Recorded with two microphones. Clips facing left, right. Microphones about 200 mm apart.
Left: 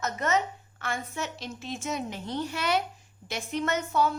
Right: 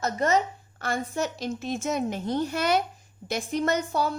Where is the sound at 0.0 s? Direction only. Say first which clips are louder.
Right 4 dB; 35° right (ahead or behind).